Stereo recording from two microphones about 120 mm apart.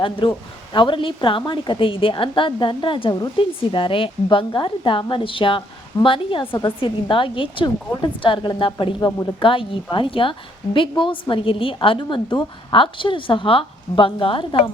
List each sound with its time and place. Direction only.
0.0 s a woman's voice: 45° left (ahead or behind)